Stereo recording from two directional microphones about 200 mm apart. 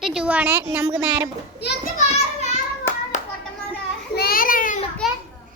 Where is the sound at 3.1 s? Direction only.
35° left (ahead or behind).